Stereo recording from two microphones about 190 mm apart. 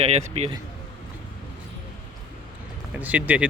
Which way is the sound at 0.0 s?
35° right (ahead or behind).